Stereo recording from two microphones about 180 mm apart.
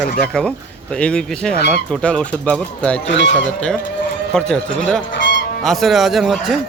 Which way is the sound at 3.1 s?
80° left.